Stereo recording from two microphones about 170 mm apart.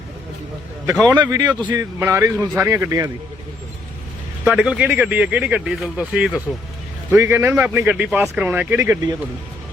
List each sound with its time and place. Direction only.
1.0 s speech: 25° right (ahead or behind)
4.4 s speech: 5° right (ahead or behind)